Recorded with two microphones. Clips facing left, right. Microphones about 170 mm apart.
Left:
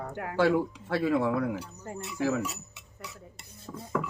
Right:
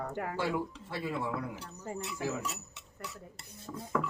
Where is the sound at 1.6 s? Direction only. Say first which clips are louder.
Left 2 dB; centre (ahead or behind).